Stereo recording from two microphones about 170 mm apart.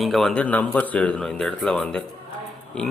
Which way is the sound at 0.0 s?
Centre (ahead or behind).